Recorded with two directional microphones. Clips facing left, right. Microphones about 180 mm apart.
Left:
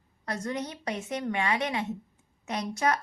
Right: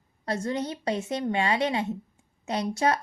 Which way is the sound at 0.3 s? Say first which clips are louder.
Right 4 dB; 30° right (ahead or behind).